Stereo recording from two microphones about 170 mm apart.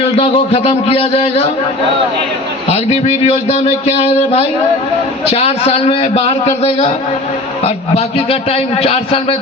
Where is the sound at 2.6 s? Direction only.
35° left (ahead or behind).